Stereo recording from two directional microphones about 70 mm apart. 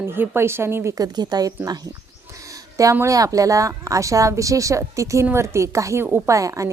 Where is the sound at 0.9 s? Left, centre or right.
Right.